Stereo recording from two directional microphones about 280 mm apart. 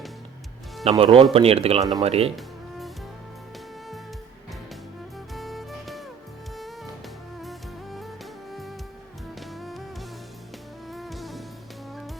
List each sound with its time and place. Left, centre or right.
0.9 s speech: centre
2.3 s music: centre
5.3 s music: centre
7.3 s music: centre
9.5 s music: centre
10.9 s music: centre